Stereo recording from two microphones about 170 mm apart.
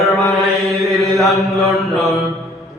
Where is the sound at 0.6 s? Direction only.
Centre (ahead or behind).